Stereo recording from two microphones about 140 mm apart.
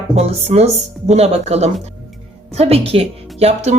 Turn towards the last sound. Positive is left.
turn(degrees=-50)  # may be behind; listen again after turning